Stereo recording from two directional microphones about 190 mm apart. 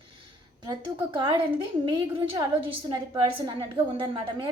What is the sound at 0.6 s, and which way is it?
Speech, 25° right (ahead or behind).